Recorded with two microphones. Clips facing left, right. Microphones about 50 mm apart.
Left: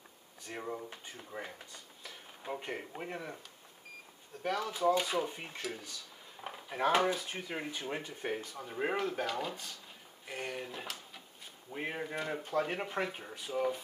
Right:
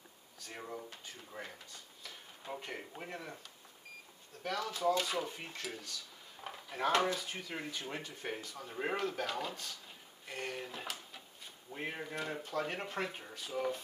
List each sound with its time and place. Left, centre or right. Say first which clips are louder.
0.5 s speech: left 4 dB; centre
4.4 s speech: left 3 dB; centre